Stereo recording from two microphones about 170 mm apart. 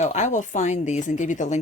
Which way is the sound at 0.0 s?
45° left (ahead or behind).